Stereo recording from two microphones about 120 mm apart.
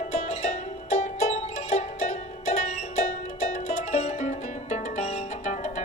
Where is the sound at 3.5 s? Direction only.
90° left.